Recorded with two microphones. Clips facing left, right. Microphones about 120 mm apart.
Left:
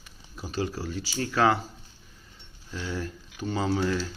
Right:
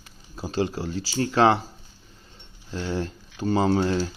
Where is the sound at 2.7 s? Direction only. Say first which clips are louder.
Right 5 dB; 30° right (ahead or behind).